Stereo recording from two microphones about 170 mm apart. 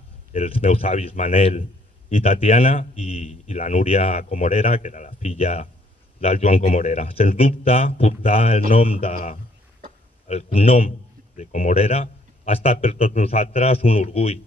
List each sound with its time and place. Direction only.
0.3 s speech: 40° left (ahead or behind)
1.6 s a sound: 40° left (ahead or behind)
2.4 s speech: 35° left (ahead or behind)